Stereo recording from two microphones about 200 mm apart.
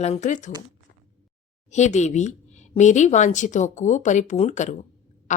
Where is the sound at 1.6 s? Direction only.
35° left (ahead or behind).